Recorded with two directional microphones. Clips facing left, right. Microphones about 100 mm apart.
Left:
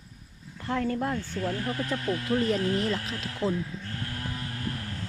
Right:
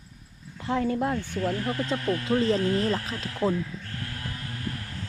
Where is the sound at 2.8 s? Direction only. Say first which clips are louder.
Right 2 dB; 35° right (ahead or behind).